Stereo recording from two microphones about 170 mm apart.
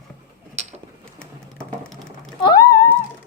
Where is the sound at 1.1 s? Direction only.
5° left (ahead or behind).